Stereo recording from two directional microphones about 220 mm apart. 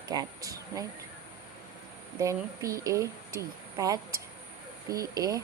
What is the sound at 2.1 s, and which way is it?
Speech, 15° right (ahead or behind).